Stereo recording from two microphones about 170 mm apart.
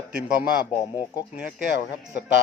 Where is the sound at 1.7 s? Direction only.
75° left (ahead or behind).